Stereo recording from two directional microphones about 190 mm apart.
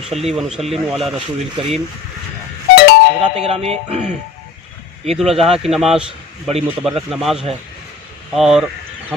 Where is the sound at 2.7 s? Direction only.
50° left (ahead or behind).